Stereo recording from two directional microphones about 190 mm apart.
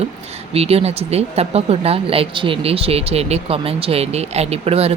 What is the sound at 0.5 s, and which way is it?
Speech, 30° right (ahead or behind).